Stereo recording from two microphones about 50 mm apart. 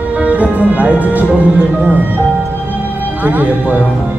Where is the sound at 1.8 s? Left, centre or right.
Right.